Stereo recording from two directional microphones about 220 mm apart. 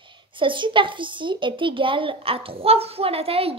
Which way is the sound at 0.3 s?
20° right (ahead or behind).